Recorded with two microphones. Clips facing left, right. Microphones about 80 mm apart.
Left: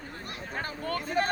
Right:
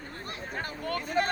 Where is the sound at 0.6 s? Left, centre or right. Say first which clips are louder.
Left 1 dB; left.